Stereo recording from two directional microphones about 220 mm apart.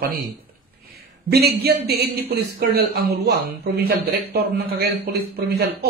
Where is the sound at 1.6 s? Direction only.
45° right (ahead or behind).